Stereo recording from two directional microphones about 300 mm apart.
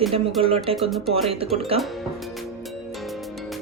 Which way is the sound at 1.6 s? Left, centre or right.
Centre.